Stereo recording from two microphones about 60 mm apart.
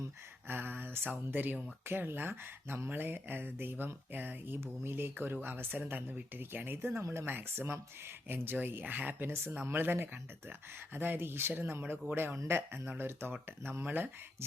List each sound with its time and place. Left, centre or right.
0.4 s speech: right
5.8 s speech: right
7.0 s speech: right
7.3 s speech: right